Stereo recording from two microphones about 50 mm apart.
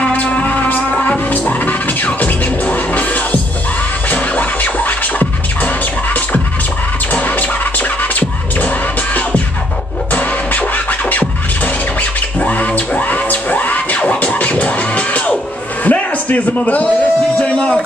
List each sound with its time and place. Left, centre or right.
0.0 s music: left
4.1 s scratching: left
15.8 s music: left